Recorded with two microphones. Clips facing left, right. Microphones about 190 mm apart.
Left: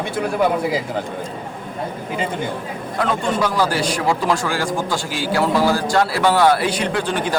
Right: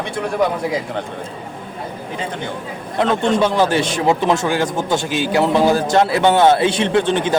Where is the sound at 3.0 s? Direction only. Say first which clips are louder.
Right 4 dB; 25° right (ahead or behind).